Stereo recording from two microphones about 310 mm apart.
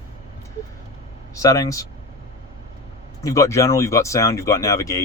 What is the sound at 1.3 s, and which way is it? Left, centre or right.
Speech, centre.